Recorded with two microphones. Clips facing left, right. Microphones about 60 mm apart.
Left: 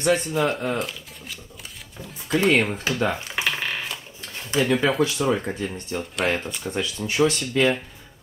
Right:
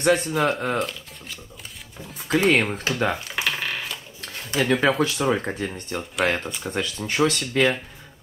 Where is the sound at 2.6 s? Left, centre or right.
Centre.